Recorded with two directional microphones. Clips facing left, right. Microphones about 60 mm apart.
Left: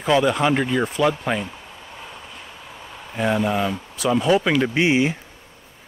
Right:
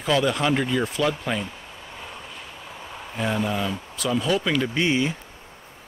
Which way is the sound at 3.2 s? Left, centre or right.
Centre.